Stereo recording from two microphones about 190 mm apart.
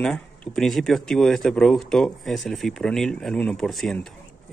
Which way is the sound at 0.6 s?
Centre (ahead or behind).